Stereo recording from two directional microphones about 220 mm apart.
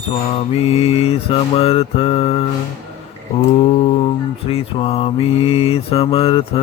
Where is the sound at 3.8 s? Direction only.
25° left (ahead or behind).